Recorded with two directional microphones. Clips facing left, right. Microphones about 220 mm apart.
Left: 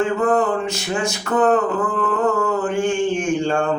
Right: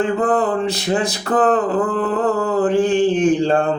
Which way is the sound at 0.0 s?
35° right (ahead or behind).